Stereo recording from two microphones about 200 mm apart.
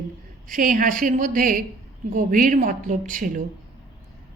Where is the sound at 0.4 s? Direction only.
40° right (ahead or behind).